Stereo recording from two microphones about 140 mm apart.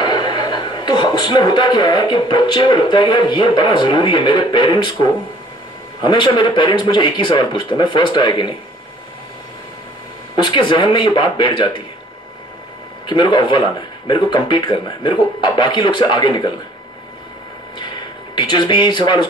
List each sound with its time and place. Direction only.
0.0 s a man's voice: 30° left (ahead or behind)
10.3 s speech: 35° left (ahead or behind)
13.0 s speech: 35° left (ahead or behind)
18.3 s speech: 30° left (ahead or behind)